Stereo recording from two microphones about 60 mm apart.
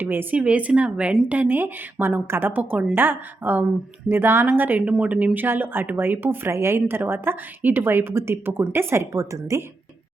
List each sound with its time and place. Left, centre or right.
0.0 s a woman's voice: right